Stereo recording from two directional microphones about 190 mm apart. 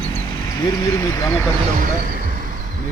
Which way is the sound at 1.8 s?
45° right (ahead or behind).